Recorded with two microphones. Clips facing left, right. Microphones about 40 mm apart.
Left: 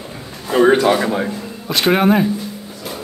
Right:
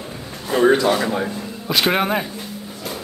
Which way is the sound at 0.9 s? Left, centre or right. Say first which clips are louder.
Left 3 dB; centre.